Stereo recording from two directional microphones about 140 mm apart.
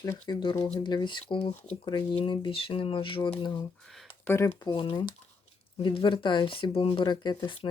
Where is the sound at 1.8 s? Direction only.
30° left (ahead or behind).